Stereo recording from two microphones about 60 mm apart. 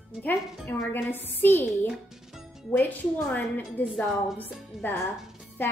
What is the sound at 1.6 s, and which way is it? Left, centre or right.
Speech, centre.